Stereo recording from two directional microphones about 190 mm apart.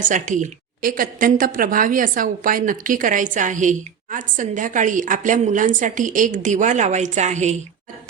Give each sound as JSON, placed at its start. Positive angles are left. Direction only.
{"t": 0.0, "sound": "a woman's voice", "side_deg": -40}